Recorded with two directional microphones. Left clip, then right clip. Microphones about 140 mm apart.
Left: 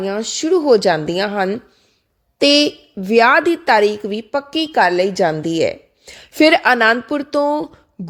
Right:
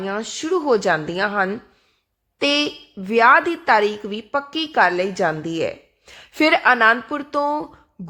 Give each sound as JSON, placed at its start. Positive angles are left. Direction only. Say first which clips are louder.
{"t": 0.0, "sound": "speech", "louder": "left 5 dB", "side_deg": 20}